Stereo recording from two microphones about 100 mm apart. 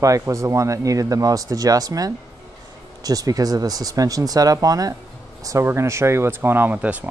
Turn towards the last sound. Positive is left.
turn(degrees=-15)  # may be behind; listen again after turning